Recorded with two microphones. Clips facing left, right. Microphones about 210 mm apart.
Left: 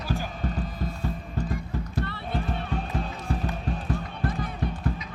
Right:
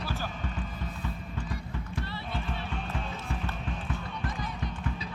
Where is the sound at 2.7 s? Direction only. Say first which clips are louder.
Left 5 dB; 40° left (ahead or behind).